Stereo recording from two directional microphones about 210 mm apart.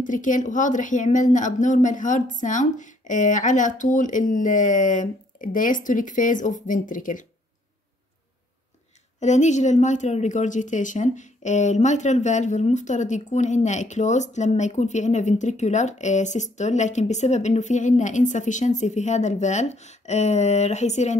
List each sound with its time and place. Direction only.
0.0 s a woman's voice: 40° left (ahead or behind)
9.2 s a woman's voice: 35° left (ahead or behind)